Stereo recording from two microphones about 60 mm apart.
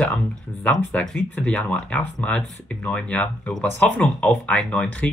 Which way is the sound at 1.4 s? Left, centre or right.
Left.